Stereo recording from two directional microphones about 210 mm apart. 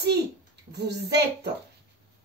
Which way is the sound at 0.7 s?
50° right (ahead or behind).